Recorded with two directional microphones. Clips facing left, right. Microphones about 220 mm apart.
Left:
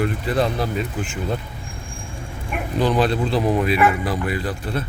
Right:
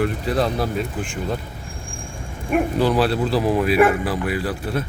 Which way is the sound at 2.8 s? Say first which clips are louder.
Left 4 dB; 5° right (ahead or behind).